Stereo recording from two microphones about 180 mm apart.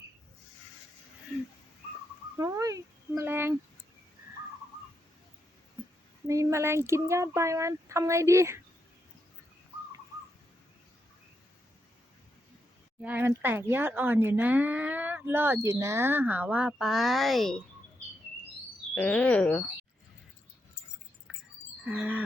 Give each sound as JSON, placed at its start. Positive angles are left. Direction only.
{"t": 2.4, "sound": "a sound", "side_deg": -20}
{"t": 6.2, "sound": "speech", "side_deg": -15}
{"t": 13.0, "sound": "speech", "side_deg": -10}
{"t": 18.9, "sound": "speech", "side_deg": 5}
{"t": 21.8, "sound": "speech", "side_deg": -5}